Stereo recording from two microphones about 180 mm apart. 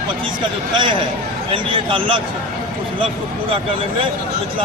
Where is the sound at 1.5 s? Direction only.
30° right (ahead or behind).